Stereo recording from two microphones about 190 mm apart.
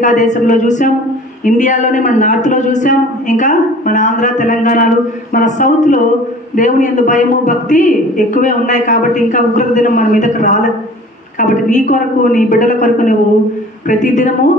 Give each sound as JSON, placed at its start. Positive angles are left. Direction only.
{"t": 0.0, "sound": "a woman's voice", "side_deg": 40}